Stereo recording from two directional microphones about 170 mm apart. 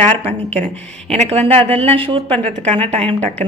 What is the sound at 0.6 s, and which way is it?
A woman's voice, 40° right (ahead or behind).